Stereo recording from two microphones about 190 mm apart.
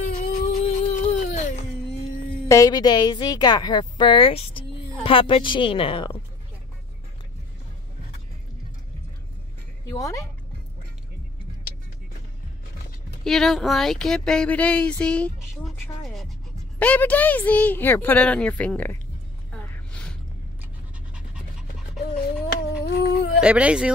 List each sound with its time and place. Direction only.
0.0 s a sound: 40° left (ahead or behind)
2.4 s a woman's voice: 15° left (ahead or behind)
9.8 s speech: 15° left (ahead or behind)
13.2 s speech: centre (ahead or behind)
19.5 s music: 10° left (ahead or behind)
21.1 s pant: 5° right (ahead or behind)
22.5 s humming: 60° left (ahead or behind)
23.4 s speech: 5° right (ahead or behind)